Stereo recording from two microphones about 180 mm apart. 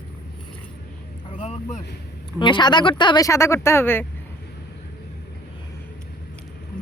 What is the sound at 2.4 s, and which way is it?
Speech, 25° left (ahead or behind).